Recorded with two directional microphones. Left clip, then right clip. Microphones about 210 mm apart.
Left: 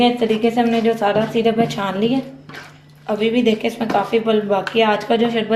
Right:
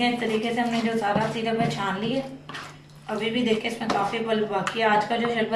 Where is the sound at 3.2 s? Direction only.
55° left (ahead or behind).